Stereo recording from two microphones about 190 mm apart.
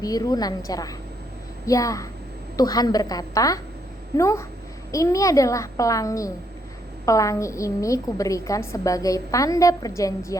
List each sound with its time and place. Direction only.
0.0 s a woman's voice: 20° left (ahead or behind)